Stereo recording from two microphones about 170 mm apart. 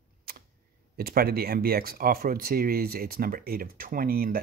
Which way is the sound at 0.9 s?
65° right (ahead or behind).